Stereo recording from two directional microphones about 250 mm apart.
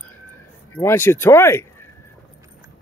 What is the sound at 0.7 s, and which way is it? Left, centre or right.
Speech, centre.